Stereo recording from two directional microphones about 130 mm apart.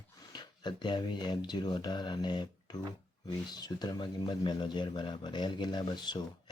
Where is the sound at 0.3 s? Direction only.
35° left (ahead or behind).